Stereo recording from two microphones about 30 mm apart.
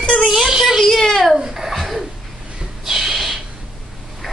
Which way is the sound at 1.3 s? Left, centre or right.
Centre.